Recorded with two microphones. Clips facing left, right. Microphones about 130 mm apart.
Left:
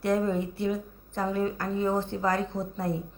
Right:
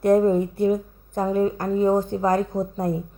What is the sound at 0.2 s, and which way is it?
A woman's voice, 45° right (ahead or behind).